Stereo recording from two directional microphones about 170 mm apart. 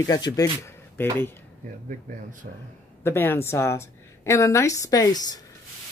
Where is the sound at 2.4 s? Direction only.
55° right (ahead or behind).